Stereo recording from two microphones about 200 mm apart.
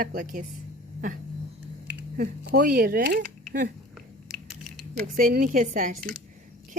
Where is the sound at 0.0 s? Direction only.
40° right (ahead or behind).